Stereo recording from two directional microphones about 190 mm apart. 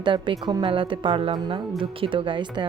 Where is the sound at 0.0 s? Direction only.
25° right (ahead or behind).